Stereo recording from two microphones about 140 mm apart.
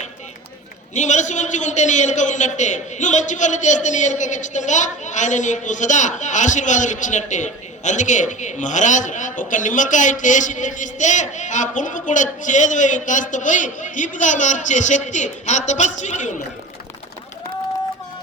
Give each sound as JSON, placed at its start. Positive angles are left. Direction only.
{"t": 0.9, "sound": "a man's voice", "side_deg": 60}